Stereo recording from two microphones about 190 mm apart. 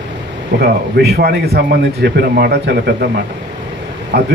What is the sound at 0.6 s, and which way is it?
A man's voice, 55° right (ahead or behind).